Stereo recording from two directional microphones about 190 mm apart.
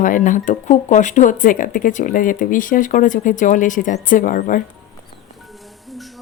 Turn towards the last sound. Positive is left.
turn(degrees=45)  # may be behind; listen again after turning